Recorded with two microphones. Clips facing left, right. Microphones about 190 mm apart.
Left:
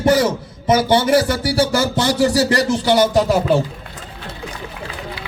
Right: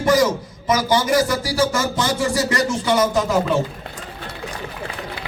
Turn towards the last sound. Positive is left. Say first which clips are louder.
# left 3 dB
turn(degrees=35)  # may be behind; listen again after turning